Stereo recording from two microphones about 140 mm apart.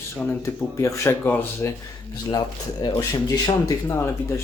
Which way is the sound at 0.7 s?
20° left (ahead or behind).